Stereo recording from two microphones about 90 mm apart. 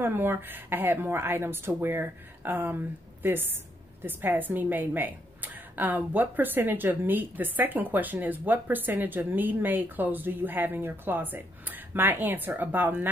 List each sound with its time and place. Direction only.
0.0 s a woman's voice: 25° right (ahead or behind)